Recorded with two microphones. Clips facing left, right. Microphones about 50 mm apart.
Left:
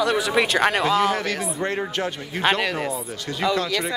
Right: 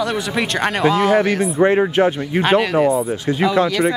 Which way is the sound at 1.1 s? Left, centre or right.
Centre.